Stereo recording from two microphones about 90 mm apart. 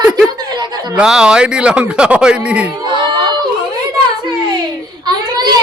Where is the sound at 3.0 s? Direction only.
60° right (ahead or behind).